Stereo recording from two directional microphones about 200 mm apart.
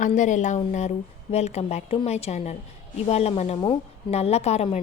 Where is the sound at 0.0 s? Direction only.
40° left (ahead or behind).